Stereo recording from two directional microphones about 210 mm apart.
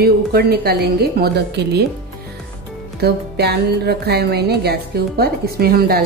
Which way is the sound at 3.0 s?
50° right (ahead or behind).